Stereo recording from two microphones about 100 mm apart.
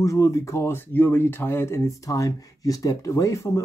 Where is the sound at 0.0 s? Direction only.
30° left (ahead or behind).